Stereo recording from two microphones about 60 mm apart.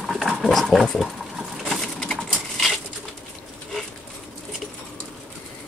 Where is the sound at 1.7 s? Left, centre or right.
Centre.